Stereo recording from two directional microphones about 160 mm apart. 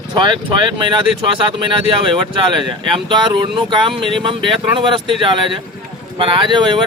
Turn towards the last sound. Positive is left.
turn(degrees=-30)  # may be behind; listen again after turning